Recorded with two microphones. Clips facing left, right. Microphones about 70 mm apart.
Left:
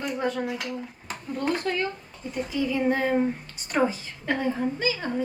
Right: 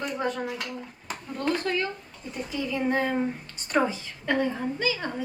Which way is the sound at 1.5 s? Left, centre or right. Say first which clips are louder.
Even; left.